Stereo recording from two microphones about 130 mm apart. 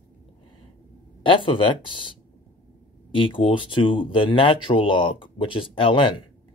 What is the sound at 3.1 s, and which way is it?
Speech, 40° left (ahead or behind).